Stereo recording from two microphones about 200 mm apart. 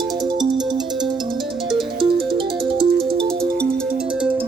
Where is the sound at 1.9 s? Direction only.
25° right (ahead or behind).